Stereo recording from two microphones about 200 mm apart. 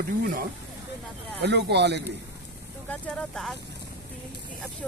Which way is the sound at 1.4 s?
55° right (ahead or behind).